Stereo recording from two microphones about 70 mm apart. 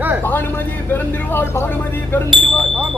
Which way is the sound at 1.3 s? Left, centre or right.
Left.